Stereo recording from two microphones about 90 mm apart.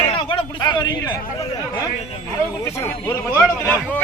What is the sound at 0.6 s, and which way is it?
Speech, 55° left (ahead or behind).